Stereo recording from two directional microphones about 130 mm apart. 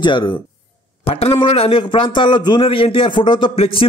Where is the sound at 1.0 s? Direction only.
50° left (ahead or behind).